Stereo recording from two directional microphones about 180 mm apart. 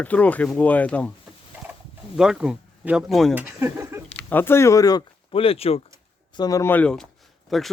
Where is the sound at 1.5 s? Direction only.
10° right (ahead or behind).